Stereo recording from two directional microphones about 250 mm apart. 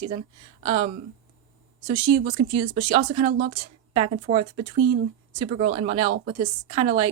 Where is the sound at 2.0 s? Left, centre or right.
Right.